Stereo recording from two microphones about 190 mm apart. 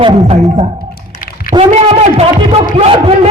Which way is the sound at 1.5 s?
35° right (ahead or behind).